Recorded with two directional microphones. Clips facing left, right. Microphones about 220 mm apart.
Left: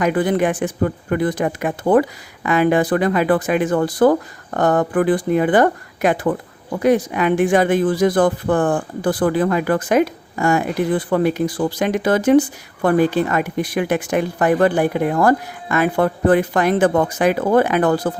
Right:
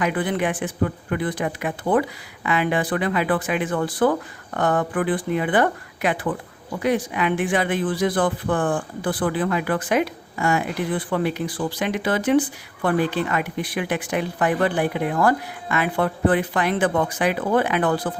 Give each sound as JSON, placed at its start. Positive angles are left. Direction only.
{"t": 0.0, "sound": "speech", "side_deg": 40}